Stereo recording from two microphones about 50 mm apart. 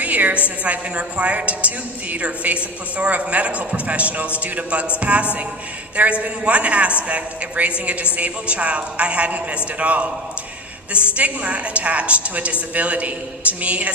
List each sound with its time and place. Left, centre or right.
0.0 s a sound: right
0.4 s a woman's voice: right
11.2 s a woman's voice: right